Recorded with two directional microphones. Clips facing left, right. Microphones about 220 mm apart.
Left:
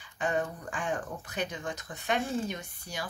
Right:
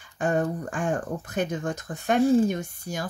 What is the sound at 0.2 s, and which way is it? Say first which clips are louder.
Speech: right 6 dB; 45° right (ahead or behind).